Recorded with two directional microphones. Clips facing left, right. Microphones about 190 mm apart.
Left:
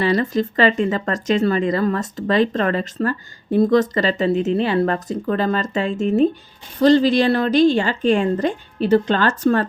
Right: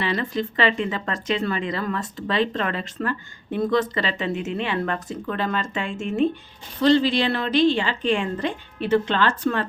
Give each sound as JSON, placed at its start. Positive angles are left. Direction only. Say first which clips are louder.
{"t": 0.0, "sound": "a woman's voice", "louder": "left 7 dB", "side_deg": 40}